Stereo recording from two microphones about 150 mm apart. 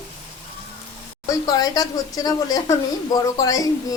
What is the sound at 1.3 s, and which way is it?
Speech, 25° left (ahead or behind).